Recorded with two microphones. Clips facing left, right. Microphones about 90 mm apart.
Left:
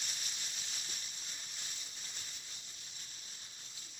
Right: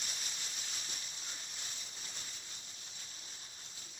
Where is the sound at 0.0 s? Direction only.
35° right (ahead or behind).